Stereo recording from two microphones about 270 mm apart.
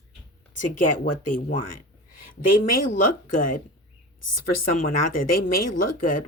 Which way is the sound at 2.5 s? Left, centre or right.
Left.